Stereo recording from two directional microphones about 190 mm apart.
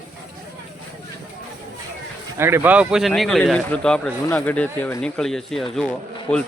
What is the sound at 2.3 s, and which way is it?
Speech, 10° right (ahead or behind).